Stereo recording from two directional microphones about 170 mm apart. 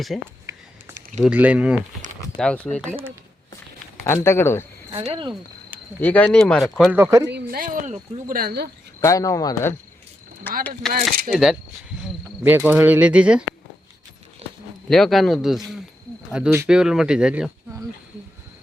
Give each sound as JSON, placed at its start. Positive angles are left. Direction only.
{"t": 0.1, "sound": "speech", "side_deg": 0}
{"t": 0.5, "sound": "a sound", "side_deg": -20}
{"t": 1.2, "sound": "speech", "side_deg": -10}
{"t": 2.4, "sound": "speech", "side_deg": 5}
{"t": 4.0, "sound": "speech", "side_deg": 15}
{"t": 4.9, "sound": "speech", "side_deg": -35}
{"t": 6.0, "sound": "speech", "side_deg": 10}
{"t": 6.9, "sound": "speech", "side_deg": -15}
{"t": 7.4, "sound": "speech", "side_deg": -55}
{"t": 9.0, "sound": "a man's voice", "side_deg": 20}
{"t": 14.4, "sound": "a sound", "side_deg": -35}
{"t": 14.8, "sound": "speech", "side_deg": 5}